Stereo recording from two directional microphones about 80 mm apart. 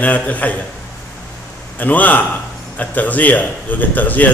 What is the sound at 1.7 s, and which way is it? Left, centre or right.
A man's voice, left.